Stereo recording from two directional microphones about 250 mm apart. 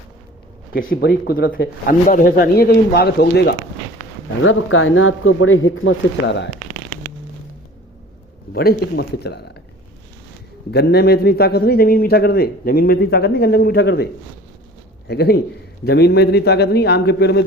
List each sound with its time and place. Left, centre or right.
0.7 s a man's voice: left
4.4 s speech: left
8.5 s a man's voice: left
10.7 s a man's voice: left